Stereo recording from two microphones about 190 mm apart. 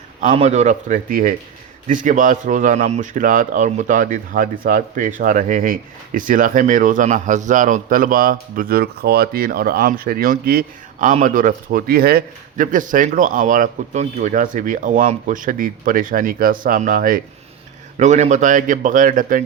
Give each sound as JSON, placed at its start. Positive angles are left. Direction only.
{"t": 0.3, "sound": "speech", "side_deg": -35}